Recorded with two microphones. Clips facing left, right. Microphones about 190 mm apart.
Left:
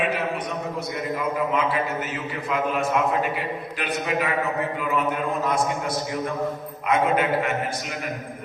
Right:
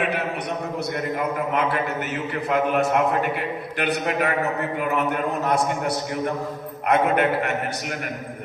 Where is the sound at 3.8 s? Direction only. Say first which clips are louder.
Right 3 dB; 60° right (ahead or behind).